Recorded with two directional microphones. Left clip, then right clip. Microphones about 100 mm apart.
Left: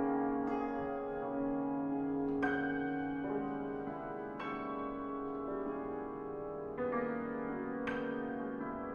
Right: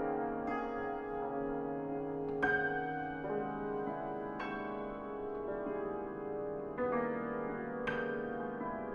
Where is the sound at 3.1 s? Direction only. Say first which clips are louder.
Even; 15° right (ahead or behind).